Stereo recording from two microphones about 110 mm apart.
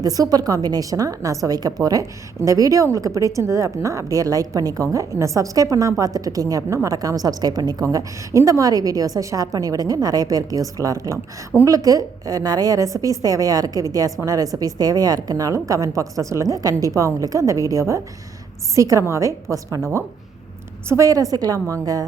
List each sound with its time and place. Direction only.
0.0 s a woman's voice: 35° right (ahead or behind)
20.8 s a woman's voice: 25° right (ahead or behind)